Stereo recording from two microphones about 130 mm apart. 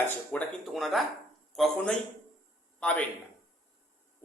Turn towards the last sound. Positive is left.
turn(degrees=10)  # may be behind; listen again after turning